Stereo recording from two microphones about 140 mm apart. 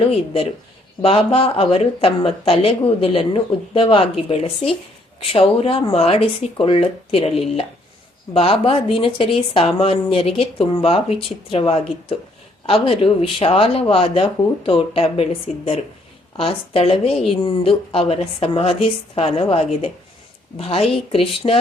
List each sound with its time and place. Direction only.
1.0 s a woman's voice: 45° left (ahead or behind)